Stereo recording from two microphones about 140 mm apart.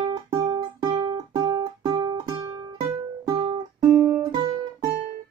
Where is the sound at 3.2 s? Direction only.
35° right (ahead or behind).